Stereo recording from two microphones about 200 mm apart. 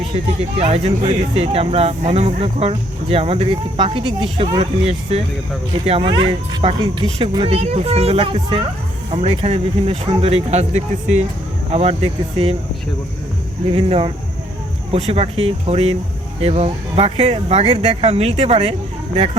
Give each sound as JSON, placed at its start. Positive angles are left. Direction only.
{"t": 0.1, "sound": "speech", "side_deg": -30}
{"t": 13.7, "sound": "speech", "side_deg": -30}